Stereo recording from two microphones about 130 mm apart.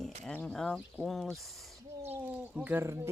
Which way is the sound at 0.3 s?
5° left (ahead or behind).